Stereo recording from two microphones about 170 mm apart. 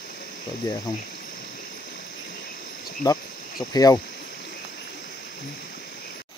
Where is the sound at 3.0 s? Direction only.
25° left (ahead or behind).